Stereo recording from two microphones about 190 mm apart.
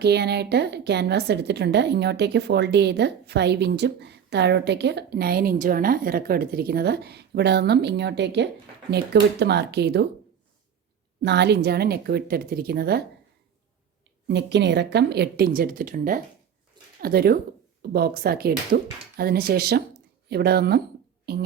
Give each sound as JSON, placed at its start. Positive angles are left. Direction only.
{"t": 0.0, "sound": "a woman's voice", "side_deg": -60}
{"t": 11.2, "sound": "a woman's voice", "side_deg": -60}
{"t": 14.3, "sound": "a woman's voice", "side_deg": -65}